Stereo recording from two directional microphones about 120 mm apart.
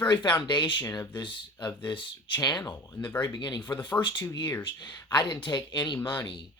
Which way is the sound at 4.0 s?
15° left (ahead or behind).